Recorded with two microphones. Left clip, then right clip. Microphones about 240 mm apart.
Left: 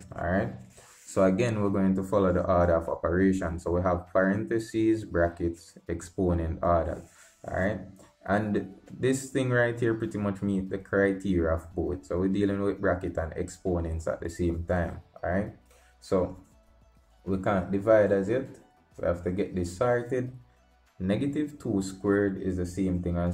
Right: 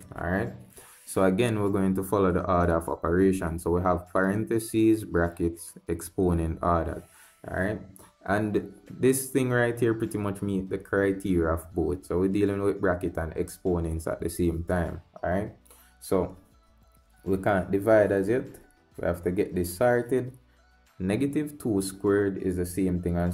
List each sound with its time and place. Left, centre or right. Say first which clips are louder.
0.1 s a sound: left 1 dB; right
1.1 s speech: even; right
14.7 s speech: even; right
17.3 s speech: right 3 dB; right